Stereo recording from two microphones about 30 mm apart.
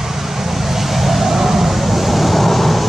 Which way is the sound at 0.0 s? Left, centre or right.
Centre.